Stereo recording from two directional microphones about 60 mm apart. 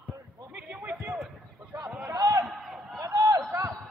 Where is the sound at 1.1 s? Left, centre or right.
Centre.